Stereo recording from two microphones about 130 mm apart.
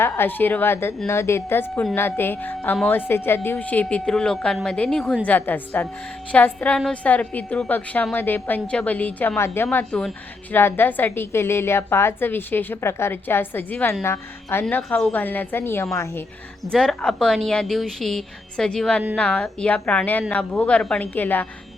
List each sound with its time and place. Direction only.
0.0 s a woman's voice: 15° left (ahead or behind)
14.6 s a woman's voice: 5° left (ahead or behind)
16.7 s a woman's voice: 5° left (ahead or behind)